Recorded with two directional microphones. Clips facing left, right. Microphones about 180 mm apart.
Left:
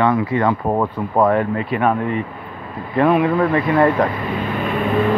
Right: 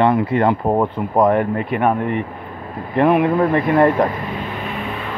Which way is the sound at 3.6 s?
40° right (ahead or behind).